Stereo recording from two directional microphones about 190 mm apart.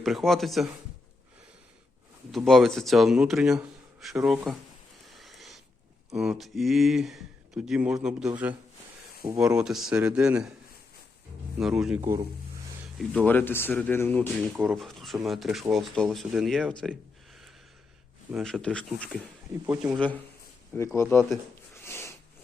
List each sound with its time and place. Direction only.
0.0 s speech: centre (ahead or behind)
2.3 s speech: centre (ahead or behind)
5.0 s a sound: centre (ahead or behind)
6.1 s speech: centre (ahead or behind)
9.2 s speech: 25° right (ahead or behind)
9.6 s speech: 5° right (ahead or behind)
11.6 s speech: 5° right (ahead or behind)
11.9 s speech: 15° right (ahead or behind)
13.0 s speech: 5° left (ahead or behind)
19.6 s speech: 5° right (ahead or behind)
20.7 s speech: 15° left (ahead or behind)
21.8 s a sound: 15° left (ahead or behind)